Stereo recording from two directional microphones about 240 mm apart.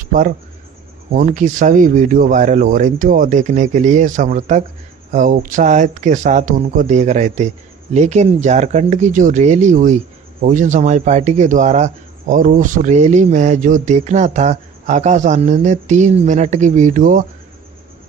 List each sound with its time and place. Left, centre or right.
0.0 s speech: right